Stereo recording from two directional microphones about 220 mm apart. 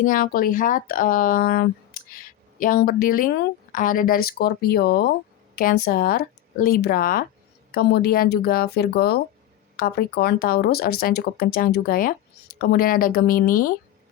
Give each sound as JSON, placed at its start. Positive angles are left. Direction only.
{"t": 0.0, "sound": "speech", "side_deg": 40}